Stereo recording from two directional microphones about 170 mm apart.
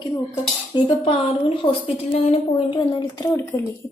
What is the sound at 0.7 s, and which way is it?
Cutlery, 25° left (ahead or behind).